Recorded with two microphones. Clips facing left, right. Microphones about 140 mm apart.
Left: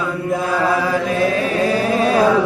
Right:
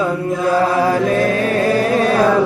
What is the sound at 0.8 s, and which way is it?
Chant, 40° right (ahead or behind).